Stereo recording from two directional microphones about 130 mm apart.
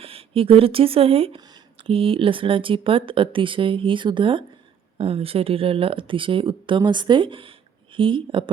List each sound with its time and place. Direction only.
0.0 s speech: 45° right (ahead or behind)